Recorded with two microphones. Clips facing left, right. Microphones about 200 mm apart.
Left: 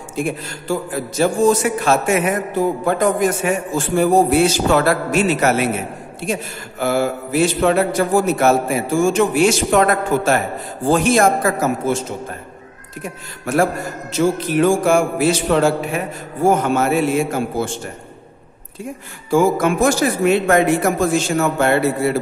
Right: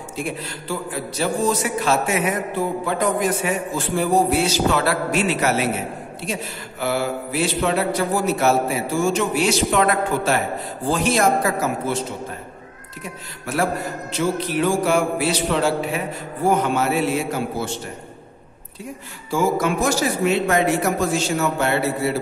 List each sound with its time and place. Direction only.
0.1 s a man's voice: 50° left (ahead or behind)
14.1 s a man's voice: 50° left (ahead or behind)
19.3 s a man's voice: 50° left (ahead or behind)